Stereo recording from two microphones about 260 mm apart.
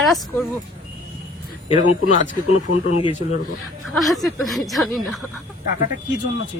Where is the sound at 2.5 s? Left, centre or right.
Left.